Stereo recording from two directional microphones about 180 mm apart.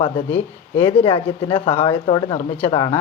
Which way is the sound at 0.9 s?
30° left (ahead or behind).